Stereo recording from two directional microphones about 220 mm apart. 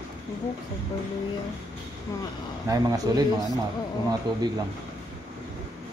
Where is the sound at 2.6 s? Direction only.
15° right (ahead or behind).